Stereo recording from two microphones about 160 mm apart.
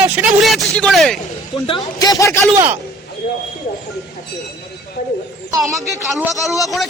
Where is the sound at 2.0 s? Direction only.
20° left (ahead or behind).